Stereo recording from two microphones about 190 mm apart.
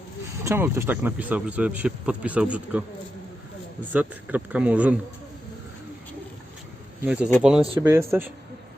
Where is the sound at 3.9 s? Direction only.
10° right (ahead or behind).